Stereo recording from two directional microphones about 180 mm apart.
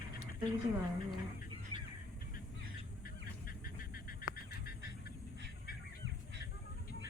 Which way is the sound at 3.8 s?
55° left (ahead or behind).